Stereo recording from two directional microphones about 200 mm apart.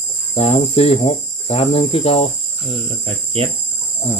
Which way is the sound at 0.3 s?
30° left (ahead or behind).